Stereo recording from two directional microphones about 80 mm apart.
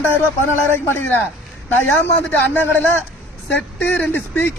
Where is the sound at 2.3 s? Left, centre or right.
Left.